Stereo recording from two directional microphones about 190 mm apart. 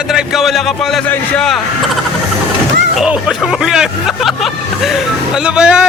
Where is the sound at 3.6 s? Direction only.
Centre (ahead or behind).